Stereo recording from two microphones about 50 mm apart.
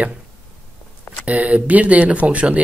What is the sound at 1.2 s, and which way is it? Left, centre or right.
Speech, right.